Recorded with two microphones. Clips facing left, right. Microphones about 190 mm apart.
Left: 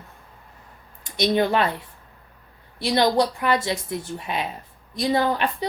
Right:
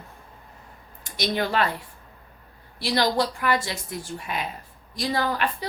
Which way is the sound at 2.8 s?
20° left (ahead or behind).